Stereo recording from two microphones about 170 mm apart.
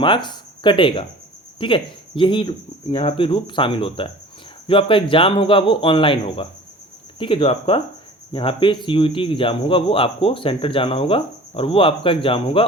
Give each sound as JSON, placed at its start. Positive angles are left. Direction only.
{"t": 0.0, "sound": "speech", "side_deg": 25}